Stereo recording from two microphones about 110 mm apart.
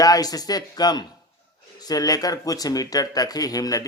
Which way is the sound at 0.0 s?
35° left (ahead or behind).